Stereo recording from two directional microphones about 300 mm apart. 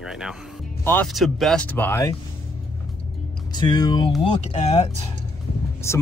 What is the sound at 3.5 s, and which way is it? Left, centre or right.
Speech, centre.